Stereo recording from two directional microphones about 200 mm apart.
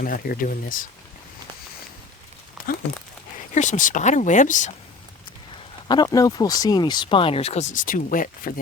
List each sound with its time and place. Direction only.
0.0 s speech: 45° left (ahead or behind)
3.5 s speech: 35° left (ahead or behind)
5.9 s speech: 20° left (ahead or behind); by 8.6 s 45° left (ahead or behind)